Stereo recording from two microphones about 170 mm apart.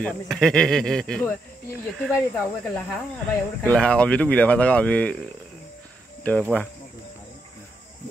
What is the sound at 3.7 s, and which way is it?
Speech, 5° left (ahead or behind).